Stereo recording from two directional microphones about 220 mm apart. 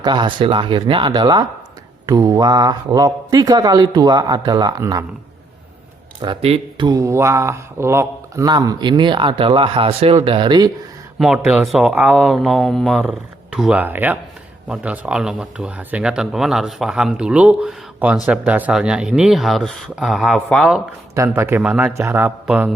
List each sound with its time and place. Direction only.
0.0 s a man's voice: 20° right (ahead or behind)
6.2 s speech: 25° right (ahead or behind)
11.2 s a man's voice: 5° right (ahead or behind)